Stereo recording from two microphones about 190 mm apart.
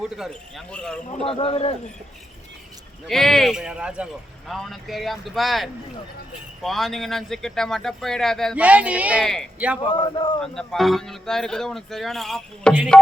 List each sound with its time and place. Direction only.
0.0 s speech: centre (ahead or behind)
1.2 s speech: 30° left (ahead or behind)
3.1 s speech: centre (ahead or behind)
9.9 s speech: 25° left (ahead or behind)
10.4 s speech: 5° left (ahead or behind)